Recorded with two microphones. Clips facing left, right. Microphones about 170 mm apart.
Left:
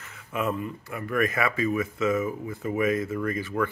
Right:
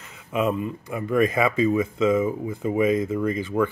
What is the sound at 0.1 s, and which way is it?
Speech, 15° right (ahead or behind).